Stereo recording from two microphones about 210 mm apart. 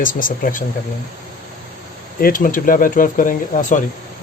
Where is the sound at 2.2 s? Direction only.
40° left (ahead or behind).